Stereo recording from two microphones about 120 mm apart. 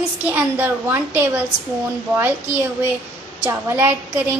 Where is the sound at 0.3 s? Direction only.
20° right (ahead or behind).